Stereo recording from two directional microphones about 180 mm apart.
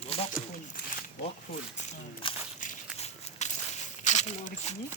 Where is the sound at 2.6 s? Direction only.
40° left (ahead or behind).